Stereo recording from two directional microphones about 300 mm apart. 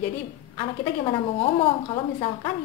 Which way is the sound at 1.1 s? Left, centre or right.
Centre.